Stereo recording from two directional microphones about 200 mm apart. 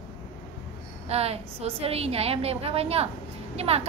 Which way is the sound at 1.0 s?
30° right (ahead or behind).